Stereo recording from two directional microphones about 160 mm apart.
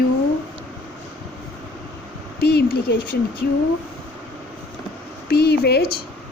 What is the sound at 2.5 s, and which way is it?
Speech, 80° left.